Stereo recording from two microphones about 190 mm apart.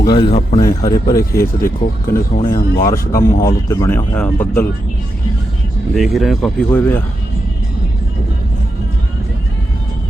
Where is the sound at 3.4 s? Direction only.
15° left (ahead or behind).